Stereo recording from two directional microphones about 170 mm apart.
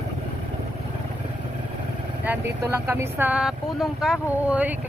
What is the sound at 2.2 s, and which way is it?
Speech, 15° right (ahead or behind).